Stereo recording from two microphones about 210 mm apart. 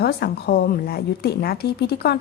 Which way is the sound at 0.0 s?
50° left (ahead or behind).